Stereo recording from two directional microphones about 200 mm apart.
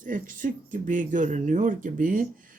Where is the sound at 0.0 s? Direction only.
40° right (ahead or behind).